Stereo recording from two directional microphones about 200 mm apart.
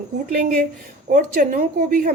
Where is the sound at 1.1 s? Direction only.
40° right (ahead or behind).